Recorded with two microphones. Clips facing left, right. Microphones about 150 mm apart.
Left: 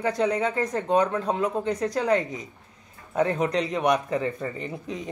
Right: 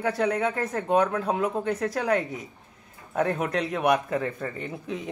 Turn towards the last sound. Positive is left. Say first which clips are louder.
# even
turn(degrees=0)  # may be behind; listen again after turning